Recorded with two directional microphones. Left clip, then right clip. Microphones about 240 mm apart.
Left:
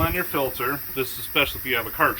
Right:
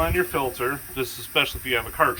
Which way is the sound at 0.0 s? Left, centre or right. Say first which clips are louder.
Right 1 dB; centre.